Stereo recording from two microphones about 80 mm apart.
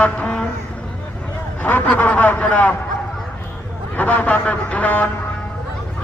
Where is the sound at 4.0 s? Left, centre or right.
Left.